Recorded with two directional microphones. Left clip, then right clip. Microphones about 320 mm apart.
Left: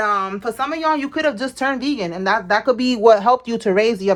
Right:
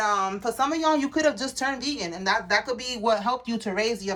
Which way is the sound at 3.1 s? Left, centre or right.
Centre.